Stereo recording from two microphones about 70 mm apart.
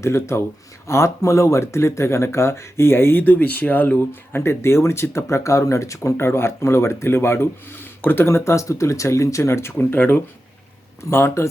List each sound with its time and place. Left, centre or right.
0.0 s speech: left